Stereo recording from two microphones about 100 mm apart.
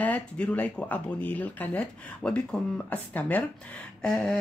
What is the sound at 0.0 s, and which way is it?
Speech, 15° left (ahead or behind).